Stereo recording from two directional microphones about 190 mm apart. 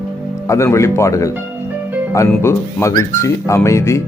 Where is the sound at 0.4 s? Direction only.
15° left (ahead or behind).